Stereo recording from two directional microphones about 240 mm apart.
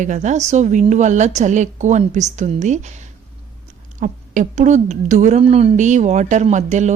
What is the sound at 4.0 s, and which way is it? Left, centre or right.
A woman's voice, right.